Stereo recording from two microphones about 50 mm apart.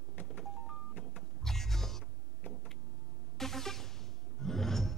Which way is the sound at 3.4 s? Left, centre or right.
Centre.